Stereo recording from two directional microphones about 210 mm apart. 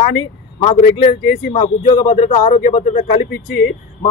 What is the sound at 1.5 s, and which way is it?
A man's voice, 30° left (ahead or behind).